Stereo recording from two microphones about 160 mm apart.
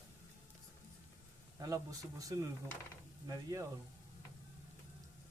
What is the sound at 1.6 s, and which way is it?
Speech, 20° right (ahead or behind).